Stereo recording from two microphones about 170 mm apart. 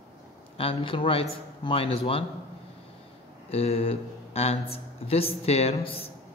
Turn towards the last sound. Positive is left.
turn(degrees=35)  # may be behind; listen again after turning